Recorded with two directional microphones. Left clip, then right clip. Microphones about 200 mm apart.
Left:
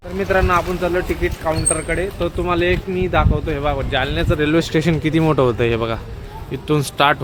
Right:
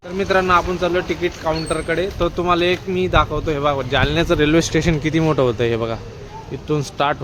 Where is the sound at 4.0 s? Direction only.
35° right (ahead or behind).